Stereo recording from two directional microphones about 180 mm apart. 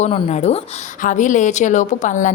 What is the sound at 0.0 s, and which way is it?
A woman's voice, 40° left (ahead or behind).